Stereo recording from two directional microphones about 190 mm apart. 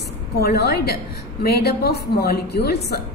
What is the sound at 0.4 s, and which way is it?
A woman's voice, 60° left (ahead or behind).